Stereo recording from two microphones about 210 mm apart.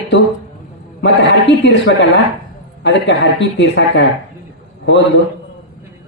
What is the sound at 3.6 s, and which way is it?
Speech, 55° left (ahead or behind).